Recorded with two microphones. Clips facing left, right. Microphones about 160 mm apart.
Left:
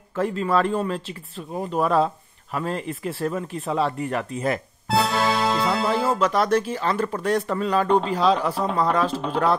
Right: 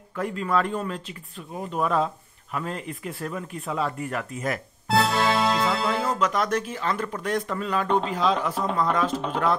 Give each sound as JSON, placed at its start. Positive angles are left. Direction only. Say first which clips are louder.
{"t": 0.1, "sound": "speech", "louder": "left 4 dB", "side_deg": 30}
{"t": 4.8, "sound": "music", "louder": "even", "side_deg": 0}
{"t": 6.0, "sound": "speech", "louder": "left 4 dB", "side_deg": 30}
{"t": 9.1, "sound": "speech", "louder": "left 2 dB", "side_deg": 0}